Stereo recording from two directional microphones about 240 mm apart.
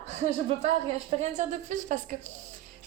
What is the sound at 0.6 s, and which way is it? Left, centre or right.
A woman's voice, right.